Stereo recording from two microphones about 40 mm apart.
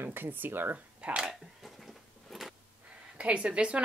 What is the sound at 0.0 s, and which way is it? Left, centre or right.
Speech, right.